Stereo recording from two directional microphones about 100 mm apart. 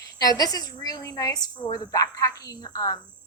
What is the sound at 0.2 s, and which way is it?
Speech, 40° left (ahead or behind).